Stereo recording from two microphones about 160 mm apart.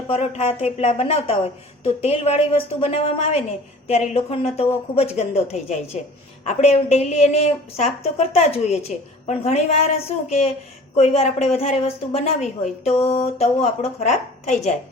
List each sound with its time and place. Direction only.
0.1 s a woman's voice: 40° left (ahead or behind)